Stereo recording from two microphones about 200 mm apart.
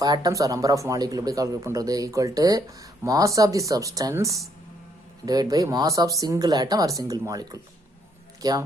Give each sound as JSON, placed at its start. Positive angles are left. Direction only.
{"t": 0.0, "sound": "speech", "side_deg": -20}